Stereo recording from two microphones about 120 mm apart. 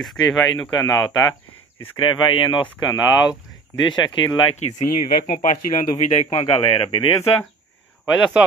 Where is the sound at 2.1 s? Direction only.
45° left (ahead or behind).